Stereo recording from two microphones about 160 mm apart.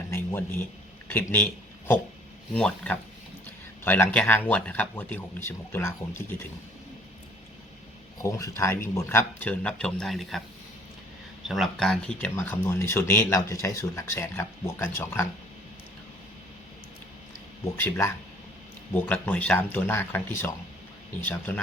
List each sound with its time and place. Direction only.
0.1 s a sound: 15° left (ahead or behind)
1.0 s speech: 10° left (ahead or behind)
2.5 s speech: 5° left (ahead or behind)
8.2 s speech: 20° left (ahead or behind); by 10.4 s centre (ahead or behind)
11.4 s speech: centre (ahead or behind); by 15.3 s 15° left (ahead or behind)
17.7 s speech: 10° left (ahead or behind)